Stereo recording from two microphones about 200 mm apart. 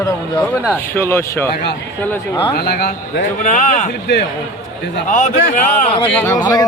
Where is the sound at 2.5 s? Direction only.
50° left (ahead or behind).